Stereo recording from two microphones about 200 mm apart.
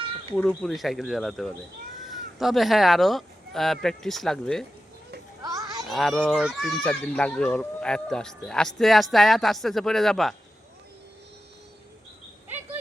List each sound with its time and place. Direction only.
0.3 s speech: 5° left (ahead or behind)
5.4 s children playing: 15° right (ahead or behind)
5.9 s speech: centre (ahead or behind)
12.5 s a sound: 10° right (ahead or behind)